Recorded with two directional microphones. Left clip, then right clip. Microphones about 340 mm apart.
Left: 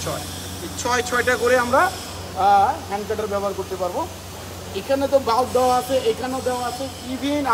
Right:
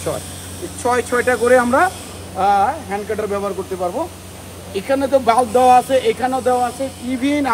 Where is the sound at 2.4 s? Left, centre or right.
Right.